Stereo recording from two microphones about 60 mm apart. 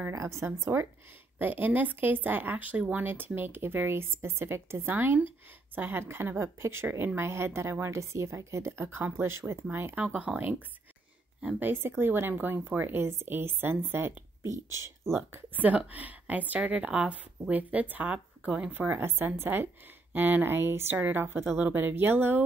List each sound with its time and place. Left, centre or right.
0.1 s speech: right
1.4 s a woman's voice: right
9.9 s speech: right
11.6 s a woman's voice: right